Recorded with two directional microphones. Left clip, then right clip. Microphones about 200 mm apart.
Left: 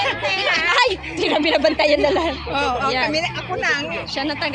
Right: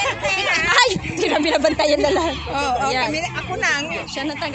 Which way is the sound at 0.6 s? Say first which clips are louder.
Right 1 dB; 15° right (ahead or behind).